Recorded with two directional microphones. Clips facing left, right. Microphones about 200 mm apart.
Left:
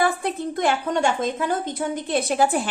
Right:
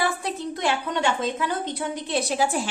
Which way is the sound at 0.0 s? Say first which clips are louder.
Left 4 dB; 55° left (ahead or behind).